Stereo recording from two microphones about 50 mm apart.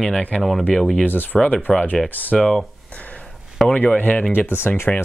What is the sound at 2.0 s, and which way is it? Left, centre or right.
Speech, left.